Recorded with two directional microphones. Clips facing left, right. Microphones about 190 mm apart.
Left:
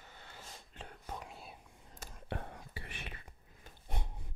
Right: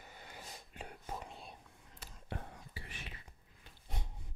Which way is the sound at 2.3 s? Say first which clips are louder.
Left 3 dB; 60° left (ahead or behind).